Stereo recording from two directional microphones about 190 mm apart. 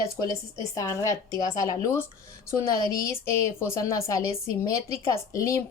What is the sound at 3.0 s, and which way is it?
A woman's voice, 15° left (ahead or behind).